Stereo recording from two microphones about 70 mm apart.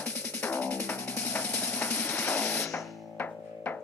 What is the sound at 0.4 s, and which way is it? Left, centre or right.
Music, left.